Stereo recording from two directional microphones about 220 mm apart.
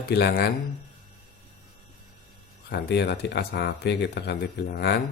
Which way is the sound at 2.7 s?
50° left (ahead or behind).